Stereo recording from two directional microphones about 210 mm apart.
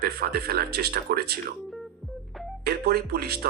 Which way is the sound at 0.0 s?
45° right (ahead or behind).